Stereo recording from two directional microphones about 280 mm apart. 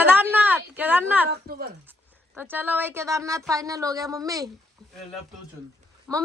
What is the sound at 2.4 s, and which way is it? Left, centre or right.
A woman's voice, centre.